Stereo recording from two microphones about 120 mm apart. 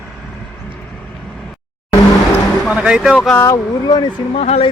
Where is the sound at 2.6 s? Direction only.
5° right (ahead or behind).